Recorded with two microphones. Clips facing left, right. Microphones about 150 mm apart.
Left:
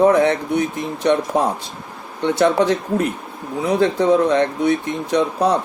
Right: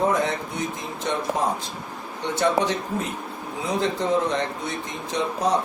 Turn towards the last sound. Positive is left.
turn(degrees=65)  # may be behind; listen again after turning